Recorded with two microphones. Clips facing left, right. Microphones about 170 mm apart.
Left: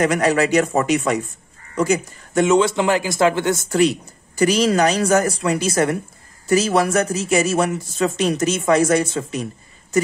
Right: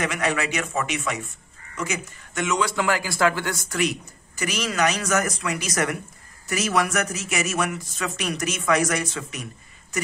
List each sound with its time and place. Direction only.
0.0 s speech: 40° left (ahead or behind)